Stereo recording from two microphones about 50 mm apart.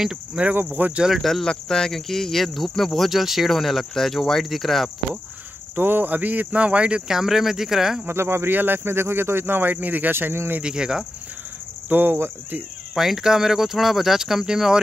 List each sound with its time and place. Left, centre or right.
0.0 s speech: centre
0.8 s speech: right
1.2 s speech: centre
5.8 s speech: right
7.1 s speech: centre
8.1 s speech: right
10.6 s speech: centre
11.9 s speech: right
12.9 s speech: centre